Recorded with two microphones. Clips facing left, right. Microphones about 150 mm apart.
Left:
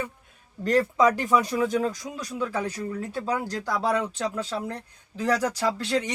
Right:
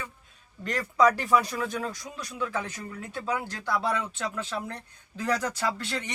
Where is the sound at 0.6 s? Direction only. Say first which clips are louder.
Left 3 dB; 30° left (ahead or behind).